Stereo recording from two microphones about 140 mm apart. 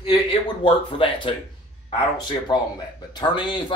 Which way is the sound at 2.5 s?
30° left (ahead or behind).